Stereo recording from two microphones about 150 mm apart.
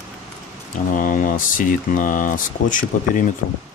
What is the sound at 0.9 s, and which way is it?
Speech, 65° left (ahead or behind).